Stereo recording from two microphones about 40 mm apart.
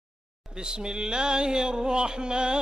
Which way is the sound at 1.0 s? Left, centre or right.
Right.